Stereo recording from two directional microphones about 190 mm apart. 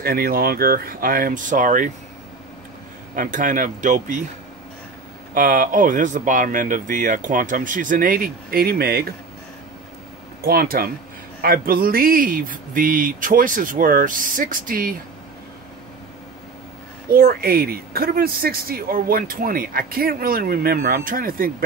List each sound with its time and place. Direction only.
0.0 s speech: 55° right (ahead or behind)
3.2 s speech: 45° right (ahead or behind)
5.3 s speech: 45° right (ahead or behind)
10.4 s speech: 50° right (ahead or behind)
17.1 s speech: 50° right (ahead or behind)